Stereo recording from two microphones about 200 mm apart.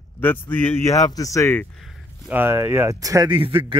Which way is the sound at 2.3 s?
10° right (ahead or behind).